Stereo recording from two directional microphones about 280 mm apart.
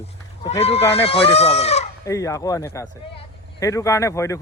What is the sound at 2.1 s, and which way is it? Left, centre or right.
Speech, centre.